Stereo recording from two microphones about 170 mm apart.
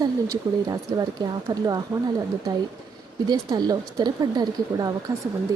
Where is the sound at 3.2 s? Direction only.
20° right (ahead or behind).